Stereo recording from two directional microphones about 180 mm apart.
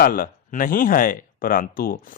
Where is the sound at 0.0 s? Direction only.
50° left (ahead or behind).